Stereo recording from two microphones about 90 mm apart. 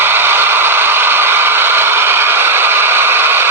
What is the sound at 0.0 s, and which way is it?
Vehicle, 25° right (ahead or behind).